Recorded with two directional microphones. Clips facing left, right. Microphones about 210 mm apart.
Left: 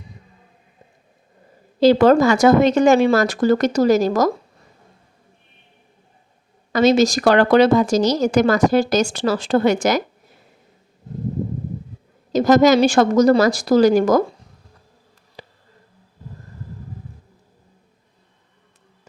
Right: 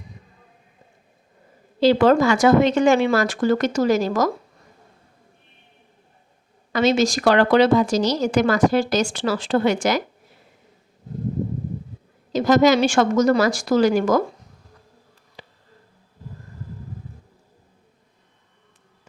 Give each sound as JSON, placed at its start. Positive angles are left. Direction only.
{"t": 1.8, "sound": "speech", "side_deg": 40}
{"t": 6.7, "sound": "a woman's voice", "side_deg": 40}
{"t": 12.3, "sound": "speech", "side_deg": 40}
{"t": 15.4, "sound": "a sound", "side_deg": 40}